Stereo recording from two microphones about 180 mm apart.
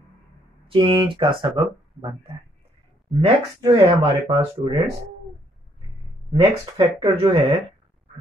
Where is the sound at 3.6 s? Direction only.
30° right (ahead or behind).